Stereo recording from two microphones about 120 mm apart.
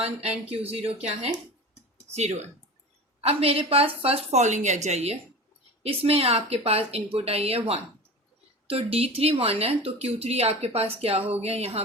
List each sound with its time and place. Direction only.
0.0 s speech: 60° right (ahead or behind)
3.2 s speech: 55° right (ahead or behind)
5.8 s speech: 55° right (ahead or behind)